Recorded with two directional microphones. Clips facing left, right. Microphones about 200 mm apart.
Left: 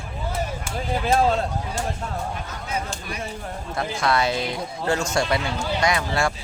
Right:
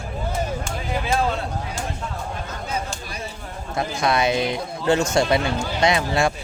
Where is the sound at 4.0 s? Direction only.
20° right (ahead or behind).